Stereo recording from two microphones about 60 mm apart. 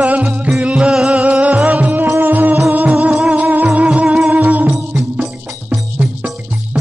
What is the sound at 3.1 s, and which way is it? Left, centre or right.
Music, centre.